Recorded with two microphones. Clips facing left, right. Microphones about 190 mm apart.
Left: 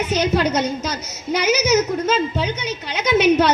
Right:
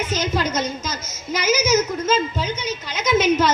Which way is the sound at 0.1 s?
65° left (ahead or behind).